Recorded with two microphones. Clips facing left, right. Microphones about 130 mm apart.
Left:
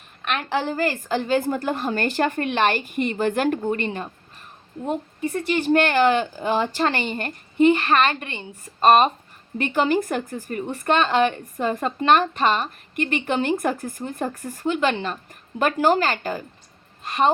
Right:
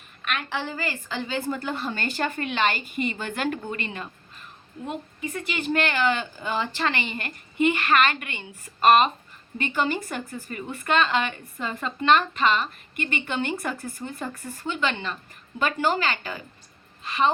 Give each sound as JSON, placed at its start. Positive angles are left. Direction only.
{"t": 0.3, "sound": "a woman's voice", "side_deg": 45}
{"t": 9.7, "sound": "a woman's voice", "side_deg": 50}